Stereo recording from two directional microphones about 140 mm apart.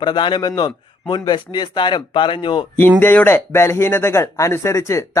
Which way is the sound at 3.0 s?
15° left (ahead or behind).